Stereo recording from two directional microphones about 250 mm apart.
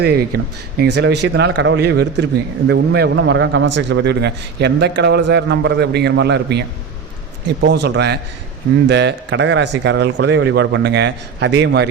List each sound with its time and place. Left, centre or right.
0.0 s a man's voice: right